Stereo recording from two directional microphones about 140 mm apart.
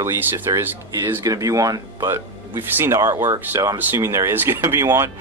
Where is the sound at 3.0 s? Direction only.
30° right (ahead or behind).